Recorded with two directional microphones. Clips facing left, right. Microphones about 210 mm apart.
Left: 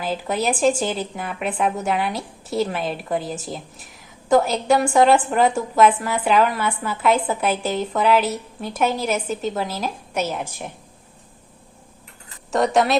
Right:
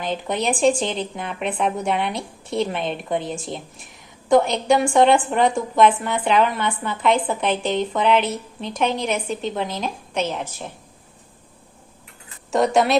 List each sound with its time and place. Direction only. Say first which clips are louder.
0.0 s a woman's voice: left 1 dB; 5° left (ahead or behind)
12.5 s a woman's voice: right 1 dB; centre (ahead or behind)